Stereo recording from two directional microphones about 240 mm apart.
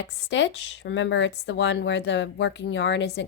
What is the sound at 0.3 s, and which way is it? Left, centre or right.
A woman's voice, left.